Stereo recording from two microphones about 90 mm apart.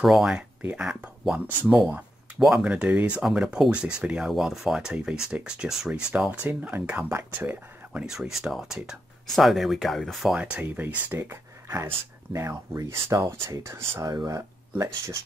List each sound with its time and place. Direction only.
0.0 s speech: 5° right (ahead or behind)
2.6 s speech: 15° right (ahead or behind)
8.1 s speech: 5° right (ahead or behind)
10.3 s speech: 15° right (ahead or behind)
11.7 s speech: 35° right (ahead or behind)
14.1 s speech: 45° right (ahead or behind)